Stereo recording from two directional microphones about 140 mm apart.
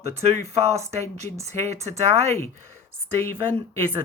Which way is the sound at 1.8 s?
50° right (ahead or behind).